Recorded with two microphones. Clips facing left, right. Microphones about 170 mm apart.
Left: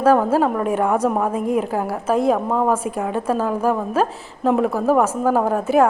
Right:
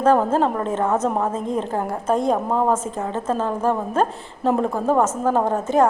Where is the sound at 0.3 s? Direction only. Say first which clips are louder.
Left 2 dB; 10° left (ahead or behind).